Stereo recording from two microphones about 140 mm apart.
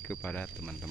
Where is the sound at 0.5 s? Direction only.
Centre (ahead or behind).